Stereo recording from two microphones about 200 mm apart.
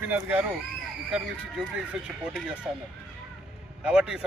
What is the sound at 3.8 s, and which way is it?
Speech, 5° right (ahead or behind).